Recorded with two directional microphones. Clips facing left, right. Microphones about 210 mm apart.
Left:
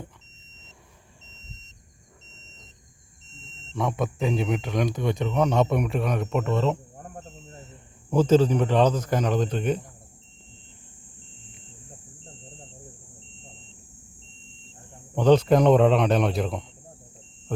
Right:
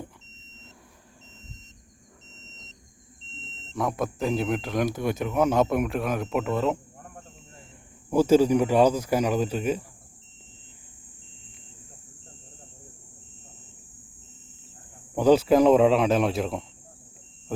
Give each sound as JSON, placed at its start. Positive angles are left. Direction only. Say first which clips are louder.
{"t": 3.7, "sound": "speech", "louder": "even", "side_deg": 0}
{"t": 6.9, "sound": "a sound", "louder": "left 5 dB", "side_deg": 35}
{"t": 8.1, "sound": "a man's voice", "louder": "right 1 dB", "side_deg": -10}
{"t": 15.1, "sound": "speech", "louder": "even", "side_deg": -5}